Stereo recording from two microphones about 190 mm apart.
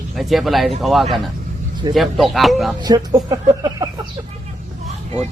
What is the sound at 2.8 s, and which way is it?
Speech, 20° right (ahead or behind).